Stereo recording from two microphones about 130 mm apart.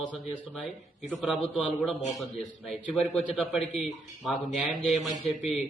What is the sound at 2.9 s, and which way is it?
A man's voice, centre (ahead or behind).